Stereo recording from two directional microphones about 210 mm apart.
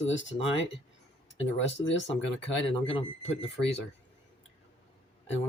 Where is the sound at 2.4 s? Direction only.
25° left (ahead or behind).